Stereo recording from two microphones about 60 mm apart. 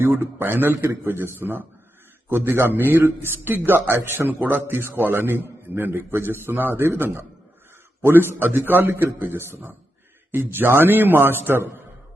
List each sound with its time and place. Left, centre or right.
0.0 s a man's voice: right